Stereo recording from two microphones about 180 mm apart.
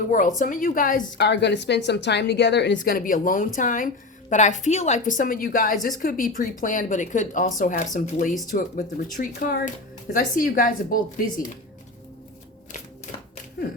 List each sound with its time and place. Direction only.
0.1 s a woman's voice: 45° left (ahead or behind)
1.3 s a woman's voice: 70° left (ahead or behind)
2.9 s a woman's voice: 50° left (ahead or behind)
12.7 s typewriter: 45° left (ahead or behind)